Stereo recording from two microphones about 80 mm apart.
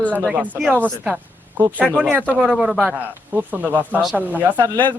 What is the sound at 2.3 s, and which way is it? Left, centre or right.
Speech, centre.